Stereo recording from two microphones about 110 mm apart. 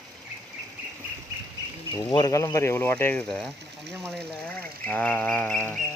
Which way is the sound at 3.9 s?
5° left (ahead or behind).